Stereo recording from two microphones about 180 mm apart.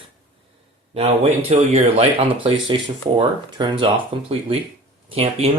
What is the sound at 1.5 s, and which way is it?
Speech, 35° right (ahead or behind).